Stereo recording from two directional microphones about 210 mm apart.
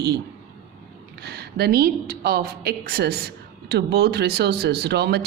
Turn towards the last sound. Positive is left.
turn(degrees=-50)  # may be behind; listen again after turning